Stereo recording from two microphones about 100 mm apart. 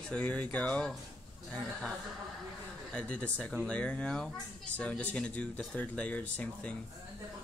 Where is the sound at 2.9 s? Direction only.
10° left (ahead or behind).